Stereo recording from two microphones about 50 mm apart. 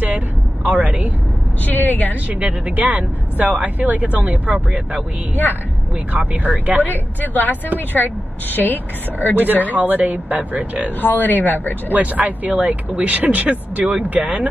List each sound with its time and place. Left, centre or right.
0.7 s speech: right
1.7 s a woman's voice: left
2.4 s speech: right
6.1 s speech: right
6.9 s a woman's voice: left
9.4 s speech: right
11.0 s a woman's voice: left
11.9 s speech: right